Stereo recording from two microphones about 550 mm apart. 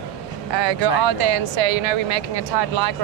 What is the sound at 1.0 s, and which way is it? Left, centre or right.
Speech, right.